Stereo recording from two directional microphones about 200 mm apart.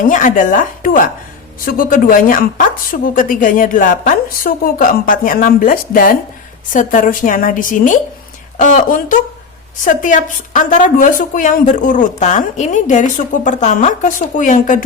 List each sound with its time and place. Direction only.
0.1 s a woman's voice: 40° left (ahead or behind)